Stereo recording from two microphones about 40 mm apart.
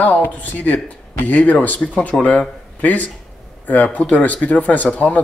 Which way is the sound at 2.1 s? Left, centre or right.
Centre.